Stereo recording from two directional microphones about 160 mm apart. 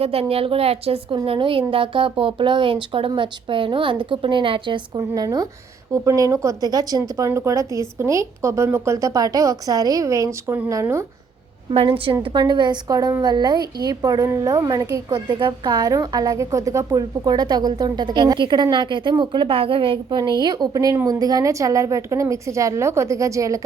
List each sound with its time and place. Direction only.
0.0 s a woman's voice: 40° right (ahead or behind); by 11.0 s 15° right (ahead or behind)
11.7 s a woman's voice: 35° right (ahead or behind); by 23.6 s 20° right (ahead or behind)